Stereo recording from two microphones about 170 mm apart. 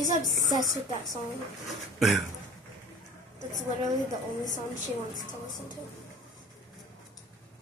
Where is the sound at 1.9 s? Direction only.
Centre (ahead or behind).